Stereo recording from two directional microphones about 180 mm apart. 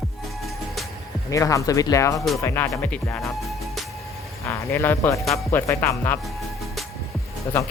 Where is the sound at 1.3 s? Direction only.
20° left (ahead or behind).